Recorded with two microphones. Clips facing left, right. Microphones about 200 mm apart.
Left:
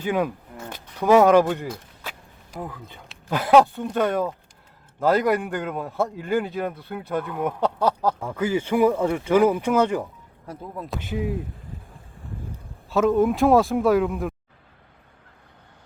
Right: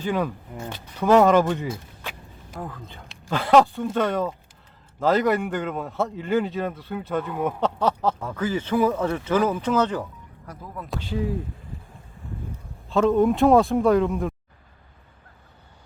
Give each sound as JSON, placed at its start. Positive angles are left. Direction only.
{"t": 0.0, "sound": "speech", "side_deg": 10}
{"t": 1.6, "sound": "vehicle", "side_deg": -5}
{"t": 2.6, "sound": "speech", "side_deg": 10}
{"t": 7.6, "sound": "speech", "side_deg": 10}
{"t": 10.0, "sound": "speech", "side_deg": 25}
{"t": 11.1, "sound": "speech", "side_deg": 15}
{"t": 12.9, "sound": "speech", "side_deg": 0}